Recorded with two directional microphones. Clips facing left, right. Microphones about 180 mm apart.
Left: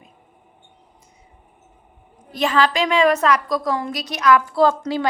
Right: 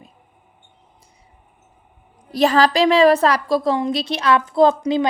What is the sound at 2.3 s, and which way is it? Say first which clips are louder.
A woman's voice: right 4 dB; 35° right (ahead or behind).